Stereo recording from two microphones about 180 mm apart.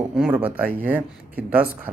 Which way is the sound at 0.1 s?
5° right (ahead or behind).